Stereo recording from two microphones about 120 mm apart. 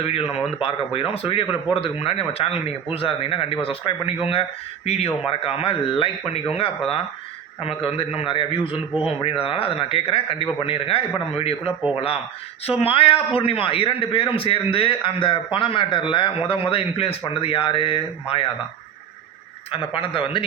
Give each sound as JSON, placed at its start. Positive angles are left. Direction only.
{"t": 0.0, "sound": "a man's voice", "side_deg": 55}
{"t": 8.9, "sound": "speech", "side_deg": -10}
{"t": 9.4, "sound": "a man's voice", "side_deg": 50}
{"t": 19.7, "sound": "a man's voice", "side_deg": 50}